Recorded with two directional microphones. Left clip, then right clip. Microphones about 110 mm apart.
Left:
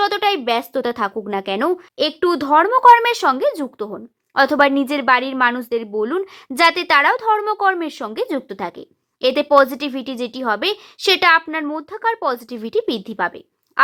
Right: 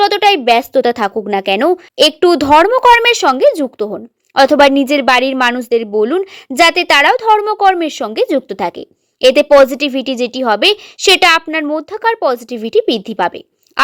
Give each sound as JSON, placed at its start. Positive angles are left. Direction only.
{"t": 0.0, "sound": "a woman's voice", "side_deg": -35}